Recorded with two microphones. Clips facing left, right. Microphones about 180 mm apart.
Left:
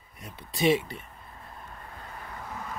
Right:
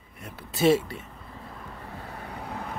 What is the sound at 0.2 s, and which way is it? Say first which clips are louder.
Speech: right 3 dB; 5° right (ahead or behind).